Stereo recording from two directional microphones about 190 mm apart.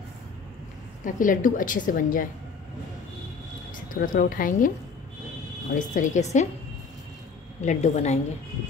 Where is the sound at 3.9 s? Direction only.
50° left (ahead or behind).